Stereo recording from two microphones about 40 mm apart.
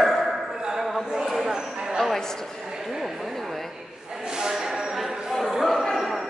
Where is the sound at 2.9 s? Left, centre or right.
Centre.